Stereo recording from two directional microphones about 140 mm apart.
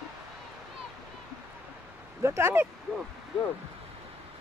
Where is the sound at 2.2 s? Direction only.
20° right (ahead or behind).